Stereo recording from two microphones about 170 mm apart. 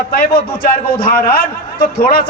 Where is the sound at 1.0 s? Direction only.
60° left (ahead or behind).